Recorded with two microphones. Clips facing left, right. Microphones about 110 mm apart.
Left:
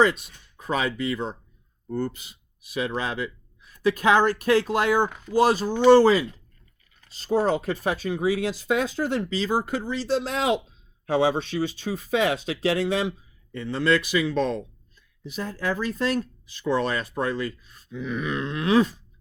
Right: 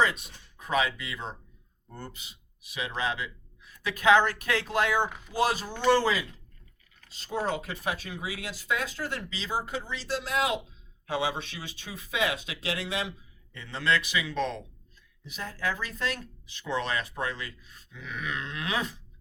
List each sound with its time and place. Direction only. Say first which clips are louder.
0.7 s speech: left 3 dB; 40° left (ahead or behind)
5.0 s speech: left 5 dB; centre (ahead or behind)
5.4 s speech: left 8 dB; 35° left (ahead or behind)
9.3 s speech: left 8 dB; 50° left (ahead or behind); by 10.6 s 30° left (ahead or behind)
11.0 s speech: left 8 dB; 45° left (ahead or behind)